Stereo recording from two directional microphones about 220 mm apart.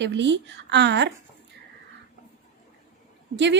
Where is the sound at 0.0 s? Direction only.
55° right (ahead or behind).